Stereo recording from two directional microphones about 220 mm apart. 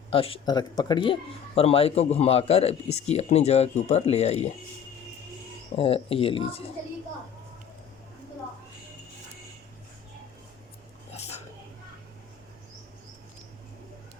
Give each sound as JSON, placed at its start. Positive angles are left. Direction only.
{"t": 0.1, "sound": "a man's voice", "side_deg": 25}
{"t": 5.7, "sound": "a man's voice", "side_deg": 25}
{"t": 11.1, "sound": "whispering", "side_deg": 30}